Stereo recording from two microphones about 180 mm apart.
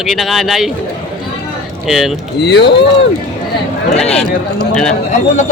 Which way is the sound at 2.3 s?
70° left (ahead or behind).